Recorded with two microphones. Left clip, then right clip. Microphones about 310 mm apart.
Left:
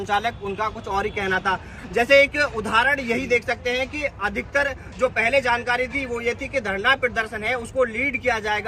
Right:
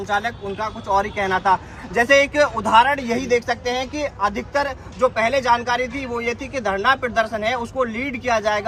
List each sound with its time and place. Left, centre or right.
0.1 s speech: centre